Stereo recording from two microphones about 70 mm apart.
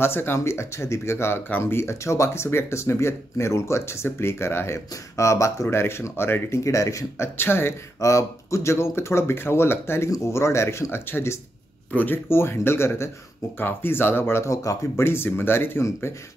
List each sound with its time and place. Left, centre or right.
0.0 s speech: left
7.3 s speech: left
8.0 s speech: left
12.3 s speech: left
14.5 s speech: left
15.0 s speech: left